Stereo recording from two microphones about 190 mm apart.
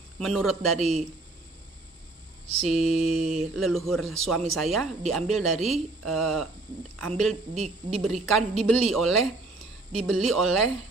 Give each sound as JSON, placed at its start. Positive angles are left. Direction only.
{"t": 0.2, "sound": "a woman's voice", "side_deg": 0}
{"t": 0.7, "sound": "mantra", "side_deg": -35}
{"t": 2.4, "sound": "mantra", "side_deg": -35}
{"t": 3.5, "sound": "a woman's voice", "side_deg": 0}
{"t": 7.5, "sound": "mantra", "side_deg": -35}
{"t": 8.0, "sound": "a woman's voice", "side_deg": 0}